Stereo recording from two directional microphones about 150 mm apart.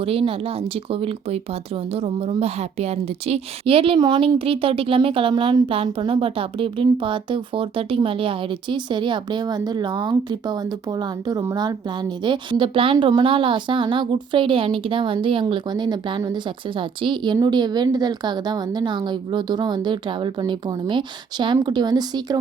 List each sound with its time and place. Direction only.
0.0 s speech: 40° right (ahead or behind)